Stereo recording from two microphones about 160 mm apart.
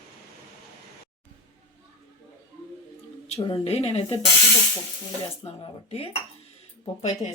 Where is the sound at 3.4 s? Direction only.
35° left (ahead or behind).